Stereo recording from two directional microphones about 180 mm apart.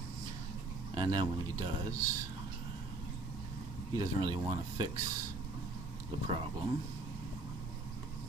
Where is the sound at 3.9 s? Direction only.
20° right (ahead or behind).